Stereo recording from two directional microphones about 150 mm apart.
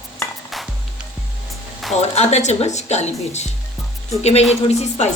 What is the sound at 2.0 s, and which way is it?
A woman's voice, 50° left (ahead or behind).